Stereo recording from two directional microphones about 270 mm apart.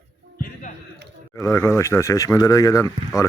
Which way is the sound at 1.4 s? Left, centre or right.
Centre.